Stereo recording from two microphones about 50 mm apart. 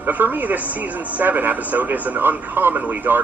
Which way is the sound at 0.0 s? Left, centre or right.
Right.